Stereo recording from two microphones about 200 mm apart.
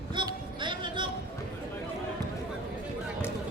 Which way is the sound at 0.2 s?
25° right (ahead or behind).